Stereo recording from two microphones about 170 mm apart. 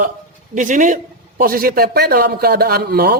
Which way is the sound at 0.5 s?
50° right (ahead or behind).